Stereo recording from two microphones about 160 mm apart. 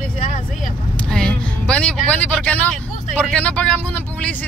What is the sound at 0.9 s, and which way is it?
Vehicle, 5° left (ahead or behind).